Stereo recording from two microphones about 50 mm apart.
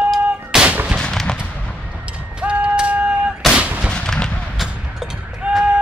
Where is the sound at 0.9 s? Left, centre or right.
Centre.